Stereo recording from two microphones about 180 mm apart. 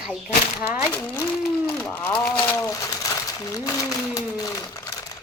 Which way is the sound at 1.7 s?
10° left (ahead or behind).